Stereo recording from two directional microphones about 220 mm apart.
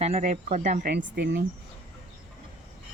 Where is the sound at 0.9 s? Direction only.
50° right (ahead or behind).